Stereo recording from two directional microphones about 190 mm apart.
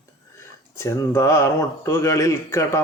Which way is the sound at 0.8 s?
15° left (ahead or behind).